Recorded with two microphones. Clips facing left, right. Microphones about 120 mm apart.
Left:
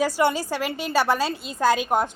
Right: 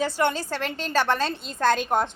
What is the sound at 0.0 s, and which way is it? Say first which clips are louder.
A woman's voice: left 3 dB; 10° left (ahead or behind).